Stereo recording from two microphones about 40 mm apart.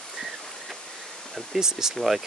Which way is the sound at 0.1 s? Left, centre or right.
Centre.